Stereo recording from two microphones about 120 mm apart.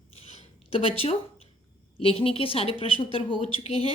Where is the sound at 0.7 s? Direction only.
50° left (ahead or behind).